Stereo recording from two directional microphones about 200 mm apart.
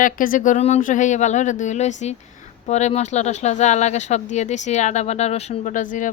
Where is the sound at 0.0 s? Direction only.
45° left (ahead or behind).